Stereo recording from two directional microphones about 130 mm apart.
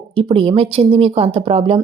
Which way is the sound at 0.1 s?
45° right (ahead or behind).